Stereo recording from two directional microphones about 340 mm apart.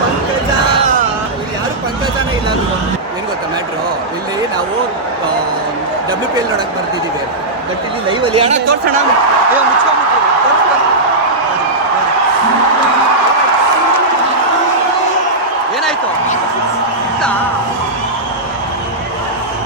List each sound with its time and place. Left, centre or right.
8.4 s speech: centre